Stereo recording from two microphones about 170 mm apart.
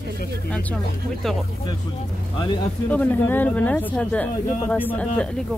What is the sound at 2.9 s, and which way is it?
Speech, 10° left (ahead or behind).